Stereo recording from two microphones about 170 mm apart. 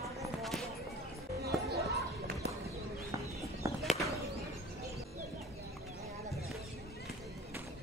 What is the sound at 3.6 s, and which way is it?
Bird, 20° right (ahead or behind).